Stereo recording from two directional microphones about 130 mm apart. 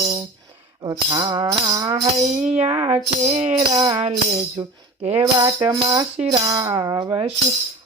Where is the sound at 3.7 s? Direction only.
35° right (ahead or behind).